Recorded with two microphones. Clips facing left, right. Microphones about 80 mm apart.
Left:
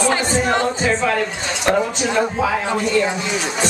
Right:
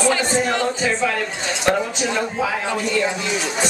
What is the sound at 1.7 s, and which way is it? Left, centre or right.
Speech, centre.